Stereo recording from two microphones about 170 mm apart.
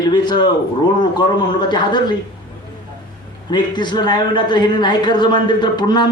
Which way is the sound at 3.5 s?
25° left (ahead or behind).